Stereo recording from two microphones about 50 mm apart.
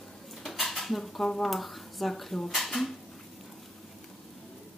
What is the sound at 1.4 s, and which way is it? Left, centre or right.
Speech, centre.